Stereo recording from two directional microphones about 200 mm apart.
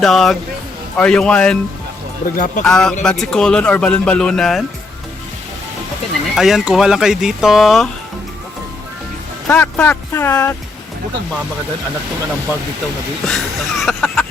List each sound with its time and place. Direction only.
0.0 s speech: centre (ahead or behind)
2.2 s speech: 45° left (ahead or behind)
2.6 s speech: 5° left (ahead or behind)
6.3 s speech: centre (ahead or behind)
9.5 s speech: 5° left (ahead or behind)
13.2 s speech: centre (ahead or behind)